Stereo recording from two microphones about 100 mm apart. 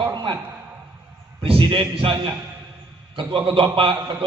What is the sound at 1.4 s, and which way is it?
A man's voice, 60° right (ahead or behind).